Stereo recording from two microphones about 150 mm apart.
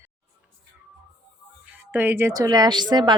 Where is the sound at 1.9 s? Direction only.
15° right (ahead or behind); by 3.2 s 30° right (ahead or behind).